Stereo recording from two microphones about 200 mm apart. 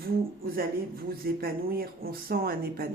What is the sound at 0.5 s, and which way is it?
Speech, 50° right (ahead or behind).